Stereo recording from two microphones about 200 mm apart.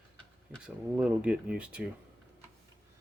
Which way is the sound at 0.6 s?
5° right (ahead or behind).